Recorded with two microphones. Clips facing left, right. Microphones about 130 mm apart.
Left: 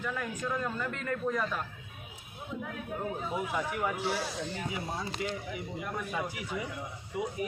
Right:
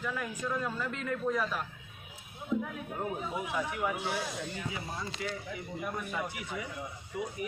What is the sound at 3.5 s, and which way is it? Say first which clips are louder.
Speech: right 1 dB; centre (ahead or behind).